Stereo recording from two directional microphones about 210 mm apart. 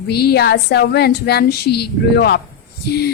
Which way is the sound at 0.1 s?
50° left (ahead or behind).